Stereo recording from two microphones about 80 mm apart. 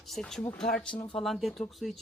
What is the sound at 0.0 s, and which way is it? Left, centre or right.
A woman's voice, centre.